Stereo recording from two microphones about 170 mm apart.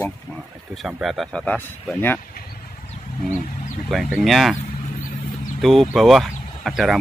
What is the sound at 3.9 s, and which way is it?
Speech, centre (ahead or behind).